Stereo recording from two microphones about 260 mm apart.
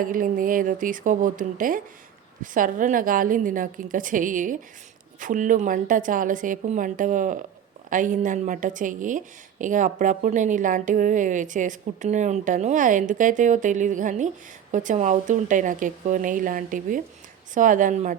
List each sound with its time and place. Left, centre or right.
0.0 s a woman's voice: right